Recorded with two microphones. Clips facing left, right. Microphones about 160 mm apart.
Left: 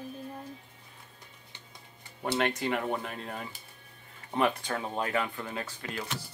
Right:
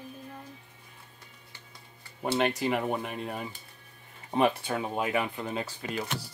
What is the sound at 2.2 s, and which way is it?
Speech, 20° right (ahead or behind).